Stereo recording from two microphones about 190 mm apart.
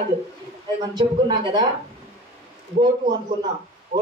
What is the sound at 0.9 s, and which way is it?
Speech, 20° right (ahead or behind).